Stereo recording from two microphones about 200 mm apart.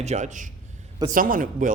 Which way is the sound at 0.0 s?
35° right (ahead or behind).